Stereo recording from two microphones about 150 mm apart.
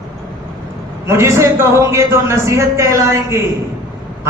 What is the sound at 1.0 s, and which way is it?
A man's voice, 20° right (ahead or behind).